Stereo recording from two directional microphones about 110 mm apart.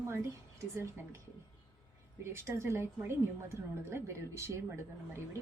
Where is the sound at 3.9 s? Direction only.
25° right (ahead or behind).